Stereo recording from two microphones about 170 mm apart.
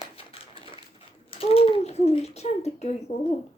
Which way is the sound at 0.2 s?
30° left (ahead or behind).